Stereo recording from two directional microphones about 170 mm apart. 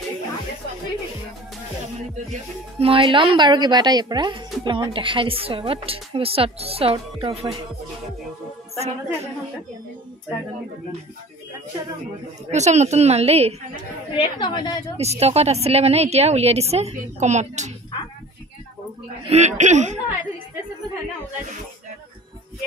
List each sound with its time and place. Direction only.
2.8 s speech: 30° right (ahead or behind)
8.7 s speech: 40° right (ahead or behind)
12.4 s speech: 40° right (ahead or behind)
14.1 s a woman's voice: 30° left (ahead or behind)
15.0 s speech: 40° right (ahead or behind)
19.2 s speech: 40° right (ahead or behind)